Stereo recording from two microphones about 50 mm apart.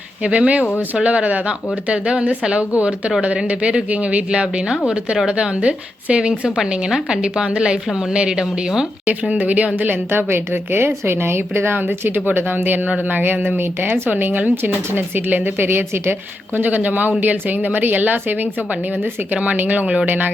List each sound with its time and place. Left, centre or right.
0.2 s speech: right
9.3 s speech: right
10.1 s a woman's voice: right
13.6 s a woman's voice: right
16.6 s speech: right